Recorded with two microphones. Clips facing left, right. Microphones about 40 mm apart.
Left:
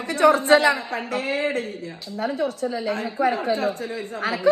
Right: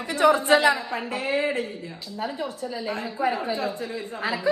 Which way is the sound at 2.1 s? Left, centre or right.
Left.